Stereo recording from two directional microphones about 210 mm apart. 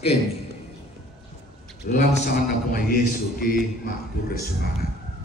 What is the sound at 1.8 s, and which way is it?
A man's voice, 45° left (ahead or behind).